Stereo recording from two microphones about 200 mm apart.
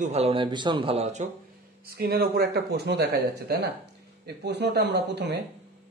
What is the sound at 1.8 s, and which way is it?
Speech, 50° right (ahead or behind).